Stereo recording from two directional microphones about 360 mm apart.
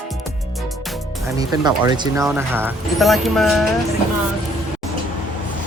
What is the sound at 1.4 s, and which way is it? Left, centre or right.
Speech, centre.